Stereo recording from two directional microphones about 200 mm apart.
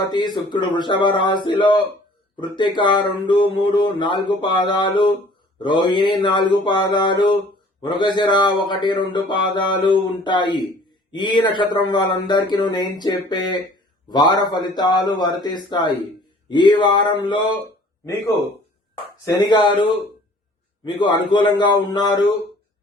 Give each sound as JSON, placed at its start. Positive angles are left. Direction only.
{"t": 0.1, "sound": "speech", "side_deg": 20}
{"t": 19.3, "sound": "speech", "side_deg": 20}